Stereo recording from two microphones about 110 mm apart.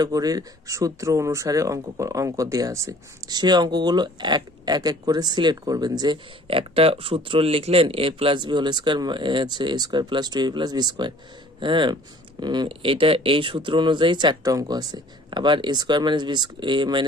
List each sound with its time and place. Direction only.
0.0 s speech: 35° right (ahead or behind)
6.5 s speech: 55° right (ahead or behind)